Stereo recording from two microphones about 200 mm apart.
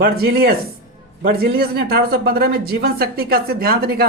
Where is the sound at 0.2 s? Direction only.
50° right (ahead or behind).